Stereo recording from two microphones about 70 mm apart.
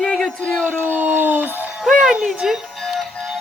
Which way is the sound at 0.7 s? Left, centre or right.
Right.